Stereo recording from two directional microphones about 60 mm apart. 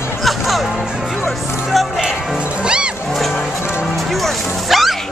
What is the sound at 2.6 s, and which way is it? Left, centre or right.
Music, centre.